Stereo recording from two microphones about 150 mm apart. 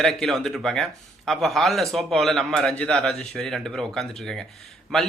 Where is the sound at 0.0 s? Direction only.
Centre (ahead or behind).